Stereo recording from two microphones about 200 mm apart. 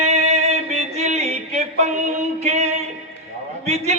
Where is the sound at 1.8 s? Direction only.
30° right (ahead or behind).